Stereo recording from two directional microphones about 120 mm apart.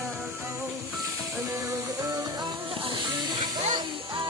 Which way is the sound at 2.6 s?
45° right (ahead or behind).